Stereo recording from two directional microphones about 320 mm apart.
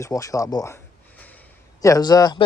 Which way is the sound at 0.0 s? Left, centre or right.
Centre.